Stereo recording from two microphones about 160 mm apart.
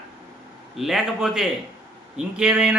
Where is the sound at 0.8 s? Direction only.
Centre (ahead or behind).